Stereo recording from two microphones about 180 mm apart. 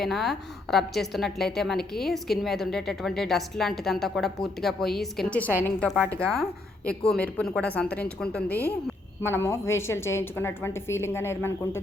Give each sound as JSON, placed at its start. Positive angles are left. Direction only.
{"t": 0.0, "sound": "a woman's voice", "side_deg": 0}
{"t": 8.5, "sound": "speech", "side_deg": 60}
{"t": 9.2, "sound": "a woman's voice", "side_deg": 15}